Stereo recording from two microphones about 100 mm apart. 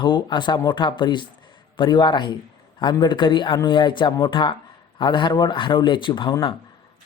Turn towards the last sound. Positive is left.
turn(degrees=55)  # may be behind; listen again after turning